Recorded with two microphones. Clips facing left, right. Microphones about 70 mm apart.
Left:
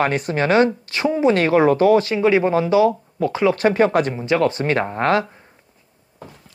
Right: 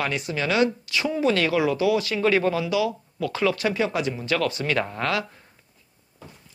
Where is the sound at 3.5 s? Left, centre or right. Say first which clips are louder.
Left 8 dB; left.